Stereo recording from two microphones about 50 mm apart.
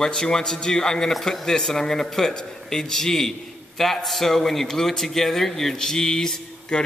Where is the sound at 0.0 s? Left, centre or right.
Centre.